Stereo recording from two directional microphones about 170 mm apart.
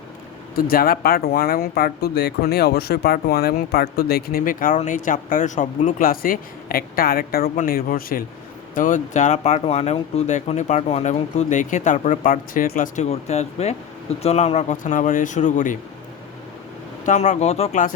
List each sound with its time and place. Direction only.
0.5 s speech: 60° left (ahead or behind)
17.1 s speech: 40° left (ahead or behind)